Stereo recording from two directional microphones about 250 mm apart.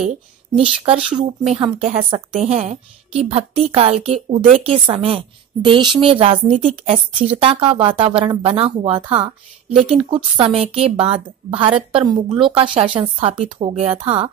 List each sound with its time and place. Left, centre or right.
1.0 s a woman's voice: right